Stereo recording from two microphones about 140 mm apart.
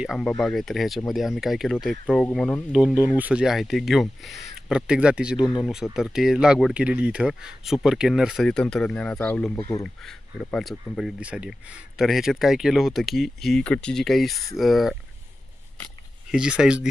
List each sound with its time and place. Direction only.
0.0 s speech: centre (ahead or behind)
3.0 s speech: 10° right (ahead or behind)
16.3 s speech: 5° right (ahead or behind)